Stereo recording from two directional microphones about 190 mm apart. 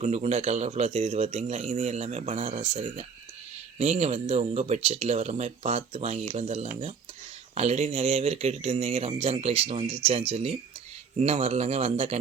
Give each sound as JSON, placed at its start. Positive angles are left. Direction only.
{"t": 0.0, "sound": "speech", "side_deg": -35}